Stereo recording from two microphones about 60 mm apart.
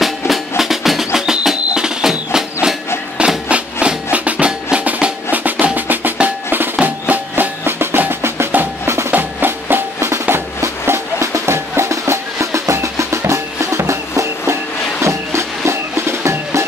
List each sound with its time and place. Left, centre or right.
0.0 s music: centre
4.8 s percussion: right
6.5 s music: right
8.1 s percussion: right
9.1 s music: right
9.9 s music: right
11.9 s music: right